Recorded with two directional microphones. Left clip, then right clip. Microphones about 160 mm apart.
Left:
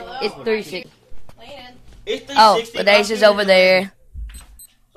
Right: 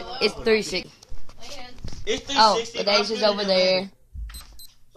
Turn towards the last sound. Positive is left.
turn(degrees=30)  # may be behind; listen again after turning